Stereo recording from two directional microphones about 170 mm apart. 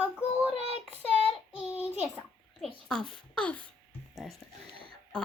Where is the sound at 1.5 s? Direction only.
10° right (ahead or behind).